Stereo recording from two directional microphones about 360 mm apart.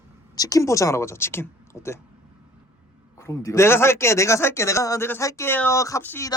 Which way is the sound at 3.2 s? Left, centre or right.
Centre.